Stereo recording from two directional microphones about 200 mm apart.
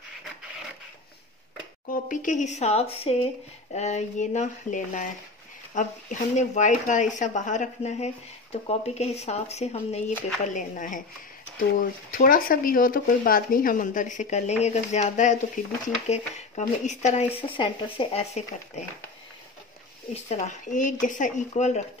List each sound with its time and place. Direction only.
1.9 s speech: 40° left (ahead or behind)
12.1 s speech: 45° left (ahead or behind)
20.2 s speech: 35° left (ahead or behind)